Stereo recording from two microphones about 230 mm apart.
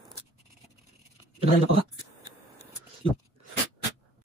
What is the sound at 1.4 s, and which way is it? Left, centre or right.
Speech, right.